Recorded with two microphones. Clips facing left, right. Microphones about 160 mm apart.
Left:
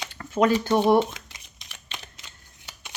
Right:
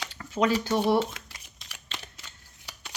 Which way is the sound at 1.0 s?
20° left (ahead or behind).